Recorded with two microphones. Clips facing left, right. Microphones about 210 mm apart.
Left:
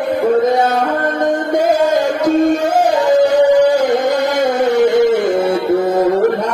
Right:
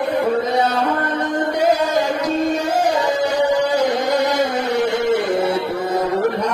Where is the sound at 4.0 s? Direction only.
50° left (ahead or behind).